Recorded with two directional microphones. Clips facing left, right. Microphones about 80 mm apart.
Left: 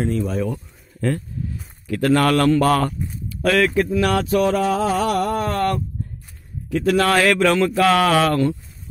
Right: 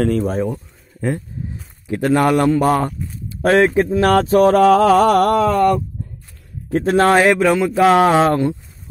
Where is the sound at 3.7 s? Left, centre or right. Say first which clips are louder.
Right 4 dB; right.